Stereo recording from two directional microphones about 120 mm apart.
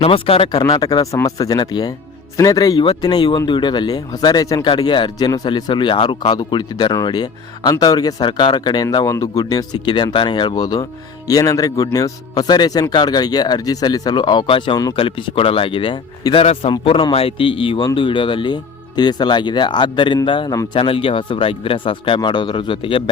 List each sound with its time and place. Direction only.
0.0 s speech: 55° left (ahead or behind)
0.7 s speech: 35° left (ahead or behind)